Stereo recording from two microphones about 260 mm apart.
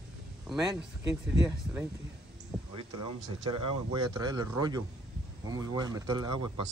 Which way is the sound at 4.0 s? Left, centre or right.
Centre.